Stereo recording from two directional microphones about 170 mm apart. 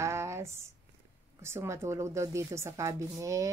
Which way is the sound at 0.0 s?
15° right (ahead or behind).